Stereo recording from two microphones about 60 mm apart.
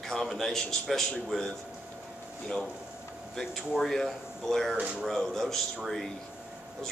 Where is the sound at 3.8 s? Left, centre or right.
Centre.